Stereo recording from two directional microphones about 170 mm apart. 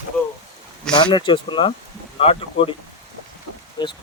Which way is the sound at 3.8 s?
25° left (ahead or behind).